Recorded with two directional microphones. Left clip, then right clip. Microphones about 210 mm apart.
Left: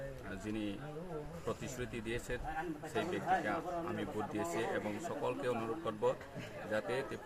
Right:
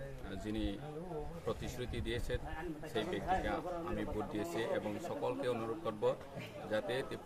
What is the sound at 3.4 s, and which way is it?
Speech, centre (ahead or behind).